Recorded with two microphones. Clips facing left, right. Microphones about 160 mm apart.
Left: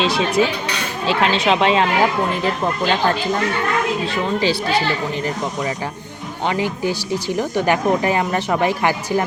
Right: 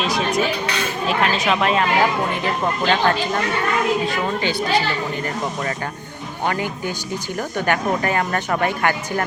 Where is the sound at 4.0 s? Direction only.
30° left (ahead or behind).